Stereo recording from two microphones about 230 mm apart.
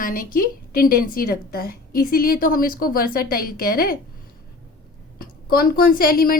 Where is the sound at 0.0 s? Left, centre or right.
Left.